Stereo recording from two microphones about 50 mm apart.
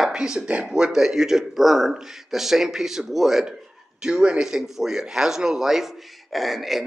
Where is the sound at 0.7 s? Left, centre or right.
Centre.